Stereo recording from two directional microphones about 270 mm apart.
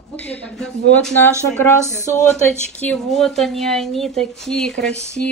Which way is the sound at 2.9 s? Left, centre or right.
Centre.